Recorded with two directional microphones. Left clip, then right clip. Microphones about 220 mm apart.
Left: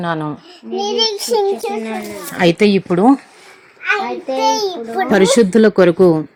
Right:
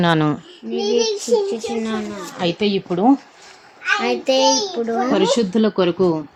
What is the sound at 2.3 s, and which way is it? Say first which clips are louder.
Speech: left 8 dB; 25° left (ahead or behind).